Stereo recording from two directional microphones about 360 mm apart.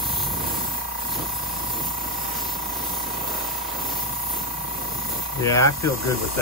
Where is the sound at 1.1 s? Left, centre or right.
Centre.